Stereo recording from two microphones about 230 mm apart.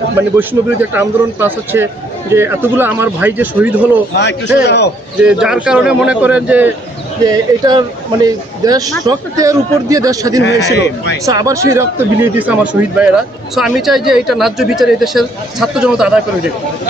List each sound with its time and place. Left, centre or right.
0.4 s speech: centre
4.1 s a man's voice: left
5.2 s speech: centre
7.2 s speech: centre
10.4 s a man's voice: left
11.2 s speech: centre
13.6 s speech: centre